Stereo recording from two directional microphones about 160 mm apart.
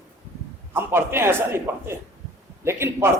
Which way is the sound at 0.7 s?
15° right (ahead or behind).